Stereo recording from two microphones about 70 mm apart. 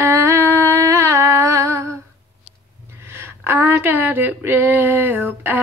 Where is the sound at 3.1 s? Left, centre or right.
Right.